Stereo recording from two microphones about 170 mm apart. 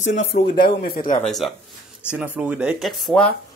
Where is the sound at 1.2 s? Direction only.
Centre (ahead or behind).